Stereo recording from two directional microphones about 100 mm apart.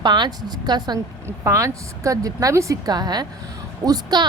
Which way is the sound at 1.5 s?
30° right (ahead or behind).